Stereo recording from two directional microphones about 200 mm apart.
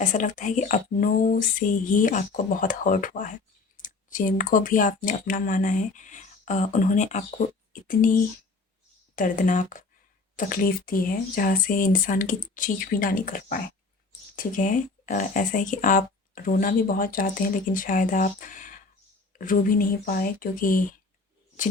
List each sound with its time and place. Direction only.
0.0 s speech: 40° left (ahead or behind)
9.1 s speech: 40° left (ahead or behind)